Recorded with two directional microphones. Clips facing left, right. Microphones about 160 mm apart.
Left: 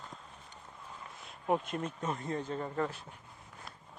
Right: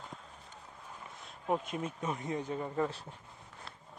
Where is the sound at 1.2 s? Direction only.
Centre (ahead or behind).